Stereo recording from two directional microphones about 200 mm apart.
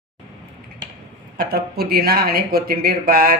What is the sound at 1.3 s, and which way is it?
Speech, 50° right (ahead or behind).